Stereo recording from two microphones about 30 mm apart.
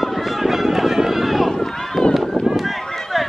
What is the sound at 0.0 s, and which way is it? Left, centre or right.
Run, centre.